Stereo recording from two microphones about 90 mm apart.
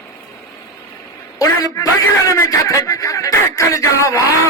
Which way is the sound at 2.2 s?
40° left (ahead or behind).